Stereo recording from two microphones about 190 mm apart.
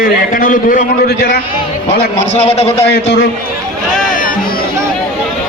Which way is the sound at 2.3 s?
30° left (ahead or behind).